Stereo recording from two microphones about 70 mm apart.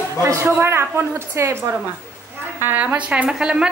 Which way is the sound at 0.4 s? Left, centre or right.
Right.